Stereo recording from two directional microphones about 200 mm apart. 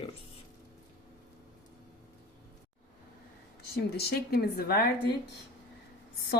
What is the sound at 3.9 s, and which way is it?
Speech, 50° left (ahead or behind).